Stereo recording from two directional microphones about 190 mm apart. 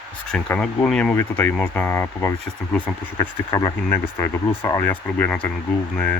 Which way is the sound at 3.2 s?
20° left (ahead or behind).